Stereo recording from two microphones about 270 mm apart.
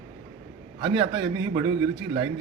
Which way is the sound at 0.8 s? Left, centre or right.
Centre.